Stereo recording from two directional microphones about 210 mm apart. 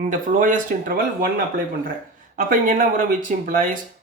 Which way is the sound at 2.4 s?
40° right (ahead or behind).